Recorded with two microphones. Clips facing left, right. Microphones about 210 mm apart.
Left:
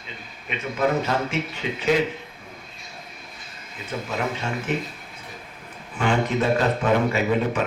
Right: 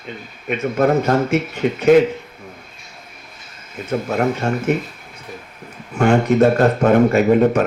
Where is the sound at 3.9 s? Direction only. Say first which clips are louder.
Right 9 dB; 50° right (ahead or behind).